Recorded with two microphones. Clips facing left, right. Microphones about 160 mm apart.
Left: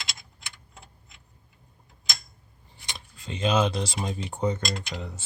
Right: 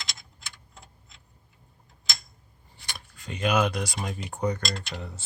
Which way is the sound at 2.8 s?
20° left (ahead or behind).